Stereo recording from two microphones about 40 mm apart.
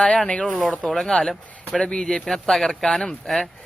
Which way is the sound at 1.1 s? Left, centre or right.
Centre.